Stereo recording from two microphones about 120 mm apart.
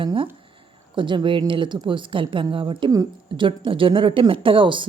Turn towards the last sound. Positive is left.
turn(degrees=-45)  # may be behind; listen again after turning